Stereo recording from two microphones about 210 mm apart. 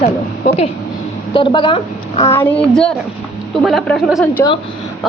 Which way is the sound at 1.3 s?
25° left (ahead or behind).